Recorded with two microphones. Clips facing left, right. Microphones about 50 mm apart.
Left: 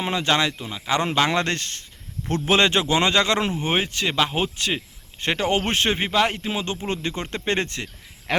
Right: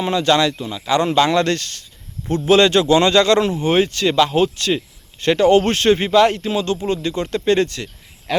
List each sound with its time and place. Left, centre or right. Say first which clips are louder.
0.0 s speech: right 5 dB; left
8.3 s speech: right 4 dB; left